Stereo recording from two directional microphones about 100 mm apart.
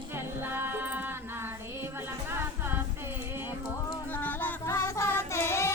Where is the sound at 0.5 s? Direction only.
25° right (ahead or behind).